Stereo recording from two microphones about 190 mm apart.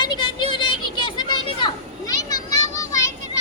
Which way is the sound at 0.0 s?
25° left (ahead or behind).